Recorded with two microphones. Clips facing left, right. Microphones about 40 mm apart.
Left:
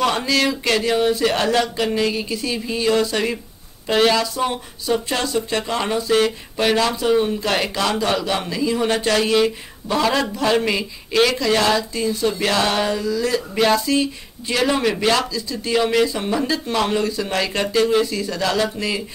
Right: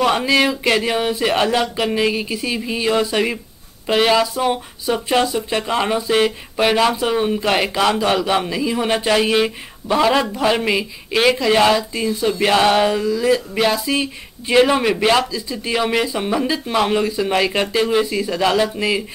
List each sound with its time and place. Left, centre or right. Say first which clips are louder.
0.0 s speech: right 3 dB; centre
14.5 s speech: right 5 dB; right